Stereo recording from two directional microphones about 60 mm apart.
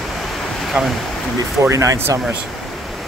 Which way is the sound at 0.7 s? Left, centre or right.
Right.